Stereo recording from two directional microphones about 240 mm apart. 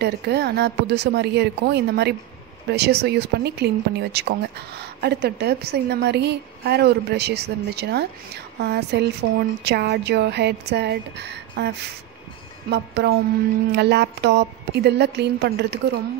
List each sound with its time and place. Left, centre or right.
0.0 s speech: right